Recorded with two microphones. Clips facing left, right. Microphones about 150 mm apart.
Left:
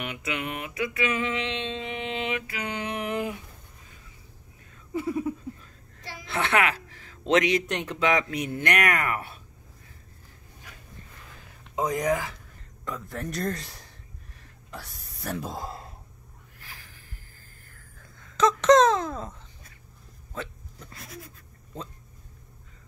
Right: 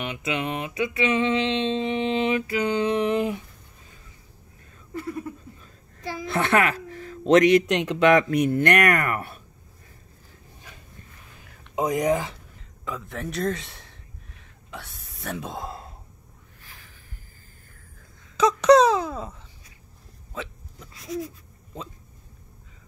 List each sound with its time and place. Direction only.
0.0 s music: 25° right (ahead or behind)
4.9 s a sound: 5° left (ahead or behind)
6.2 s a man's voice: 45° right (ahead or behind)
7.7 s speech: 75° right (ahead or behind); by 9.4 s 50° right (ahead or behind)
11.7 s music: 15° right (ahead or behind)
12.8 s a sound: centre (ahead or behind)
18.4 s speech: 10° right (ahead or behind)